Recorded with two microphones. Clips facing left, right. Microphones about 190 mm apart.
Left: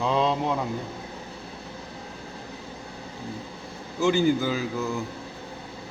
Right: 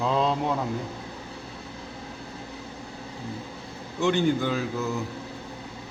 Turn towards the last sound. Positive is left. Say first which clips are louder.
# even
turn(degrees=0)  # may be behind; listen again after turning